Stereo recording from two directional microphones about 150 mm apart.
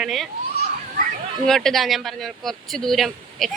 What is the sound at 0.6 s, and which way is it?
Children playing, 70° right (ahead or behind).